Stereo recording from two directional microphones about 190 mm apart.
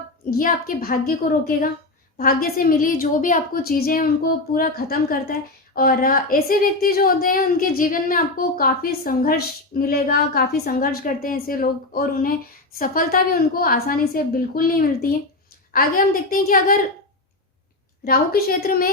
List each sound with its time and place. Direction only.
0.3 s a woman's voice: 50° left (ahead or behind)
18.0 s a woman's voice: 50° left (ahead or behind)